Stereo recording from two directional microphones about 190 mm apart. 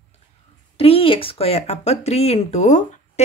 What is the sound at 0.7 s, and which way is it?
Speech, 30° left (ahead or behind).